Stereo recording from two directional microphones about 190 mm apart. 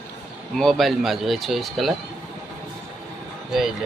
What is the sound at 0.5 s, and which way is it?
Speech, centre (ahead or behind).